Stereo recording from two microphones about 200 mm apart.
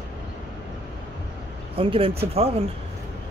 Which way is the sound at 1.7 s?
30° right (ahead or behind).